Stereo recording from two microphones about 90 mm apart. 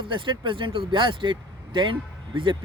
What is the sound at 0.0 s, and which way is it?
Speech, 65° right (ahead or behind).